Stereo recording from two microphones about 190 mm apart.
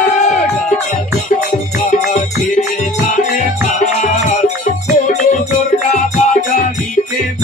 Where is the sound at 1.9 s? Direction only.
40° left (ahead or behind).